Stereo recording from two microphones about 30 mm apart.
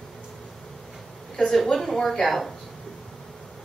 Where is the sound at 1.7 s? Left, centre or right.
Centre.